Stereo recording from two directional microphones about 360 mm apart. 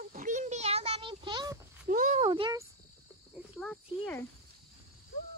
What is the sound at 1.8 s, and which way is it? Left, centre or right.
Speech, right.